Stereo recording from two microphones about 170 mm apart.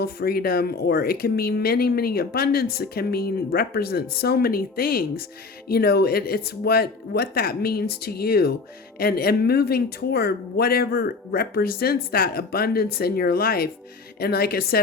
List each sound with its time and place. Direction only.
0.0 s speech: 65° left (ahead or behind)